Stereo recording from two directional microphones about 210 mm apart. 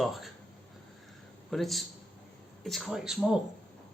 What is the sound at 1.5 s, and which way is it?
Speech, centre (ahead or behind).